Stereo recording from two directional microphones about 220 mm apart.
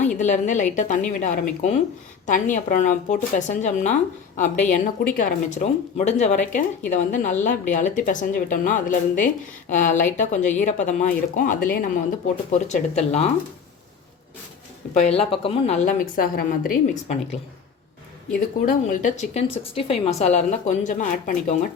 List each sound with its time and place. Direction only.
0.0 s a woman's voice: 35° left (ahead or behind)
14.9 s a woman's voice: 30° left (ahead or behind)
18.3 s a woman's voice: 35° left (ahead or behind)